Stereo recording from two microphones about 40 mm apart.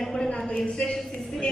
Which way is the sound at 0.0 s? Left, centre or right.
Centre.